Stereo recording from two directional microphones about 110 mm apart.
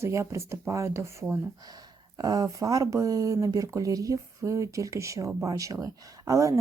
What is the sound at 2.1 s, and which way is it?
Speech, 35° right (ahead or behind).